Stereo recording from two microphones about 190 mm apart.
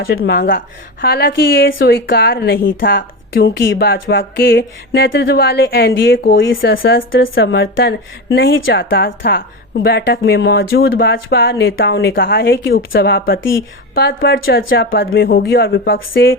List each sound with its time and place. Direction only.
0.0 s a woman's voice: 65° left (ahead or behind)
5.2 s a woman's voice: 55° left (ahead or behind)
7.1 s a woman's voice: 90° left; by 11.6 s 55° left (ahead or behind)
11.6 s a woman's voice: 90° left; by 12.2 s 70° left (ahead or behind)
12.2 s a woman's voice: 55° left (ahead or behind); by 15.2 s 80° left
15.2 s a woman's voice: 55° left (ahead or behind); by 16.4 s 75° left (ahead or behind)